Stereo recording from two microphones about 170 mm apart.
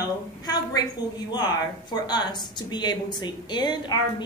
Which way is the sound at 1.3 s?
25° left (ahead or behind).